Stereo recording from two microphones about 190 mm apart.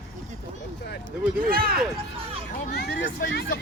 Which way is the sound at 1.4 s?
50° right (ahead or behind).